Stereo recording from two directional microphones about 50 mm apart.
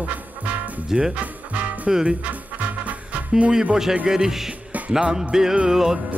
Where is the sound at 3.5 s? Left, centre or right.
Centre.